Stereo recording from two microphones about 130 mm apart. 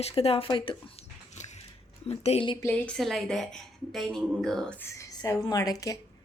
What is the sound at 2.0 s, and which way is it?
Speech, 55° left (ahead or behind).